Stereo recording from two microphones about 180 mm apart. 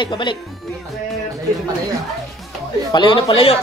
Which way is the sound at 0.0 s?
25° left (ahead or behind).